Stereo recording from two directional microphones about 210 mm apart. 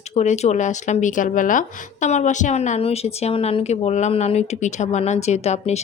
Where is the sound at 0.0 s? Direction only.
35° left (ahead or behind).